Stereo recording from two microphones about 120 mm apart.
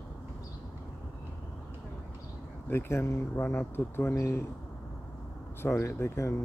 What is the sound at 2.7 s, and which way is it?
Speech, 20° left (ahead or behind).